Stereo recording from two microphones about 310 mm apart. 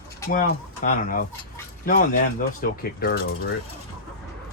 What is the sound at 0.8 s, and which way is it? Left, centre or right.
Speech, left.